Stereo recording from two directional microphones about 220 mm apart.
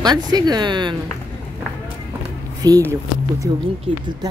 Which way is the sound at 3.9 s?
25° right (ahead or behind).